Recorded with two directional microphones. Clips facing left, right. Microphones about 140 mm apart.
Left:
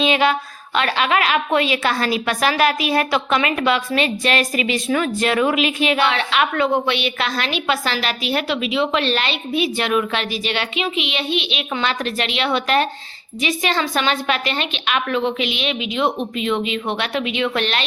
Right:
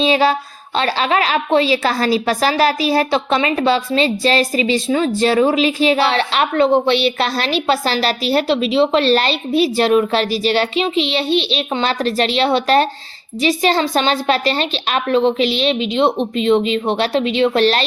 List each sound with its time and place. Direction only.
0.0 s speech: 35° right (ahead or behind)